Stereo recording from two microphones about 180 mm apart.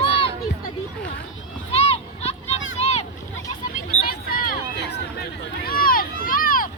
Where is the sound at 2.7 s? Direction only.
40° left (ahead or behind).